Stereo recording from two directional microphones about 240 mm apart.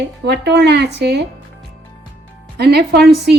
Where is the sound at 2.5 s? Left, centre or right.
Right.